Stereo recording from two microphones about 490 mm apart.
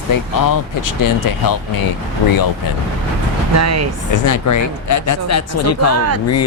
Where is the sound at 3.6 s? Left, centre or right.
Right.